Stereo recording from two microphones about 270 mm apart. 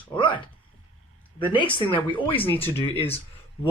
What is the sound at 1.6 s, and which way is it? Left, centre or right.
Speech, centre.